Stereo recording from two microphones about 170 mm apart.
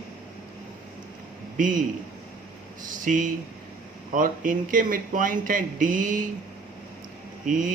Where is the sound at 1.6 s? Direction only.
50° right (ahead or behind).